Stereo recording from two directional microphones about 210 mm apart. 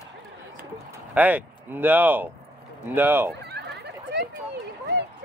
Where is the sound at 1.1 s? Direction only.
10° right (ahead or behind).